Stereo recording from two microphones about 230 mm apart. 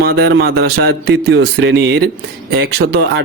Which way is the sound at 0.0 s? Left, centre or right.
Right.